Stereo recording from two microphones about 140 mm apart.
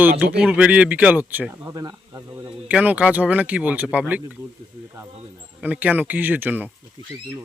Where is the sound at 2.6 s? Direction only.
10° right (ahead or behind).